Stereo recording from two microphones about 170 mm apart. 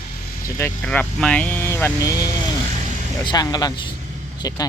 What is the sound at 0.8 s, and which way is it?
Speech, 5° left (ahead or behind).